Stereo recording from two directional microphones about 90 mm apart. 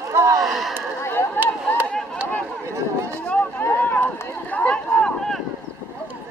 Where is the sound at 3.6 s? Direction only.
20° left (ahead or behind).